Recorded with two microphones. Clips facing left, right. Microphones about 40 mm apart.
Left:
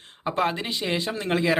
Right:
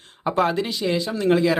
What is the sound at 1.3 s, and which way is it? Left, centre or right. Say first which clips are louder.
Speech: right 5 dB; centre.